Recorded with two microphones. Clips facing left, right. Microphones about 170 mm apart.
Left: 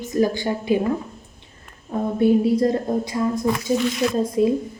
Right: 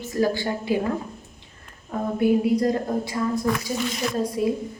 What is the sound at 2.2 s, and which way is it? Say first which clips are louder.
Speech: left 3 dB; 25° left (ahead or behind).